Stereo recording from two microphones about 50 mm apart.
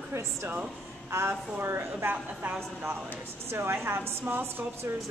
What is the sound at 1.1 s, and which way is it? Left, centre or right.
A woman's voice, right.